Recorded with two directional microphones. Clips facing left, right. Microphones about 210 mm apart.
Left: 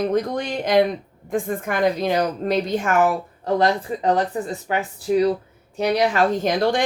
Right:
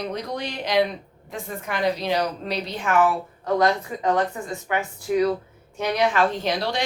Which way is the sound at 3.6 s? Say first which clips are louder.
Left 1 dB; 35° left (ahead or behind).